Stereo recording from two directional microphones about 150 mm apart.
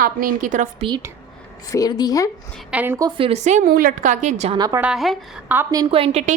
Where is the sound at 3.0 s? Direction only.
30° right (ahead or behind); by 3.7 s 50° right (ahead or behind).